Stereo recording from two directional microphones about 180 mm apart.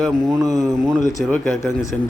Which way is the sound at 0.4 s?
20° right (ahead or behind).